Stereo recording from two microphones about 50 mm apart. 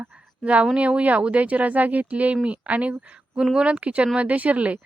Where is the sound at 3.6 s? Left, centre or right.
Right.